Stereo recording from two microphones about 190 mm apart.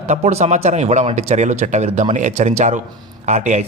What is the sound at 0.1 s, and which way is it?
Speech, 35° right (ahead or behind).